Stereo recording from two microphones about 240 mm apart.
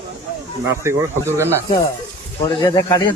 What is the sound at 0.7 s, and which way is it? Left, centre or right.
Speech, centre.